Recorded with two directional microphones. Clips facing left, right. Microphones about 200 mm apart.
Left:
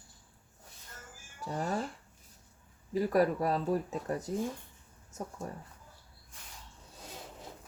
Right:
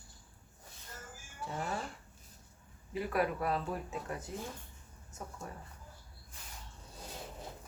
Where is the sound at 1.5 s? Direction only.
40° left (ahead or behind).